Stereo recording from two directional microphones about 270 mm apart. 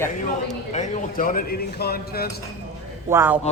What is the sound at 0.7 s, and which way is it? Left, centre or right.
Speech, left.